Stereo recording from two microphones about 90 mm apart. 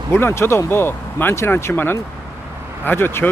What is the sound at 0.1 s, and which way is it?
Speech, 30° left (ahead or behind).